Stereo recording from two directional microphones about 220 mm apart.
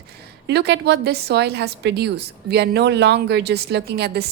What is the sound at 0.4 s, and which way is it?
A woman's voice, 50° right (ahead or behind).